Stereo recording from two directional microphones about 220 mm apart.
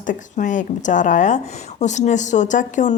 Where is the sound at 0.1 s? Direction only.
35° left (ahead or behind).